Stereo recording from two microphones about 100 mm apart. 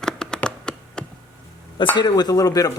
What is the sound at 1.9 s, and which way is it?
Speech, 45° left (ahead or behind).